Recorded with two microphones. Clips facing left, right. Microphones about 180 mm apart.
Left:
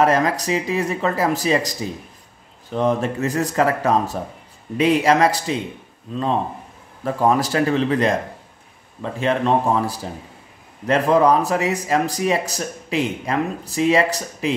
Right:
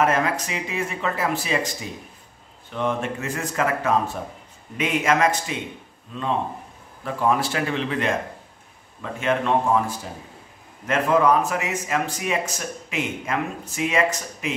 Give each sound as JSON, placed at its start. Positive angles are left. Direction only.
{"t": 0.0, "sound": "speech", "side_deg": 35}
{"t": 7.1, "sound": "speech", "side_deg": 40}